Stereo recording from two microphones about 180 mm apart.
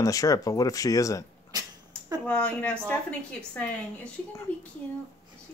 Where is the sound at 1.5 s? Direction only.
20° right (ahead or behind).